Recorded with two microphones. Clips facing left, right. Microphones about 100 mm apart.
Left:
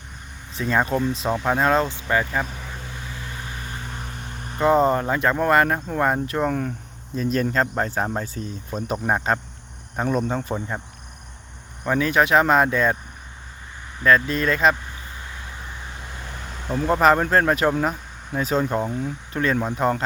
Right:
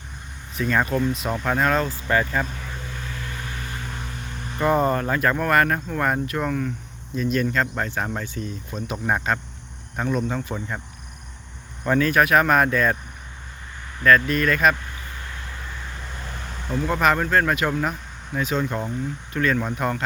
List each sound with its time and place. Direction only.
0.6 s speech: 20° left (ahead or behind)
2.0 s vehicle: 10° left (ahead or behind)
4.1 s speech: 25° left (ahead or behind)
11.8 s speech: 15° left (ahead or behind)
14.0 s speech: 20° left (ahead or behind)
15.2 s vehicle: 15° left (ahead or behind)
16.7 s speech: 35° left (ahead or behind)